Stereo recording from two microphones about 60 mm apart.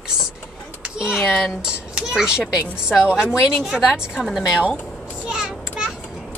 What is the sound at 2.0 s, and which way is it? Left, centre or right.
A woman's voice, centre.